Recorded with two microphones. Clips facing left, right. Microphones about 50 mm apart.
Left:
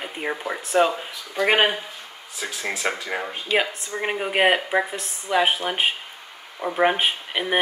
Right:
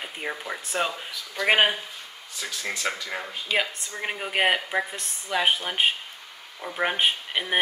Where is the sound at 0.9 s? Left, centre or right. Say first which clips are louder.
Left 5 dB; left.